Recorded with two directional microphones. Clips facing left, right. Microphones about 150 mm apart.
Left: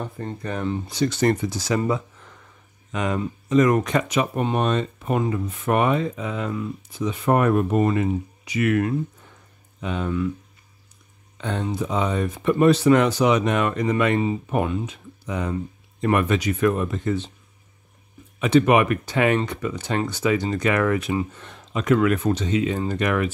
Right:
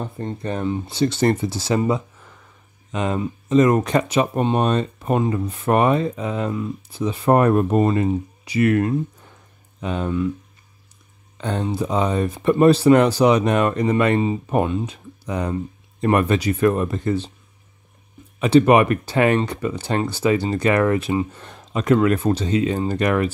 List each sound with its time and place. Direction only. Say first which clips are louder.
0.2 s speech: right 4 dB; 25° right (ahead or behind)
11.4 s speech: right 3 dB; 35° right (ahead or behind)
18.4 s speech: right 3 dB; 35° right (ahead or behind)